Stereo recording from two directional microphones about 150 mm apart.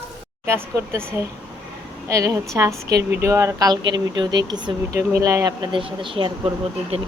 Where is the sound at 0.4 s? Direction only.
15° right (ahead or behind).